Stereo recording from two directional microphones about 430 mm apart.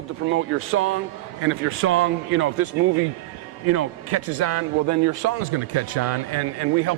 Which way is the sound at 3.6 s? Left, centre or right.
Right.